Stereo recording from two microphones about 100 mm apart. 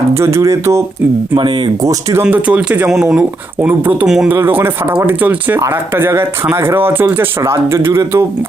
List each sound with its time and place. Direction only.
0.1 s speech: 25° right (ahead or behind)
1.4 s speech: 50° right (ahead or behind)
2.2 s speech: 10° right (ahead or behind)
2.9 s speech: centre (ahead or behind)
3.2 s speech: 15° right (ahead or behind)
4.0 s speech: 5° right (ahead or behind)
4.3 s speech: 20° right (ahead or behind)
5.5 s speech: 30° right (ahead or behind)